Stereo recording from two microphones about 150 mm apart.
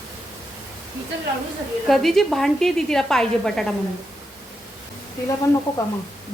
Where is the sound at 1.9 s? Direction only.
Centre (ahead or behind).